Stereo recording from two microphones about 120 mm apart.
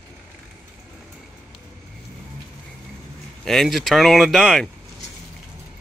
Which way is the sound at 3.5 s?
Centre (ahead or behind).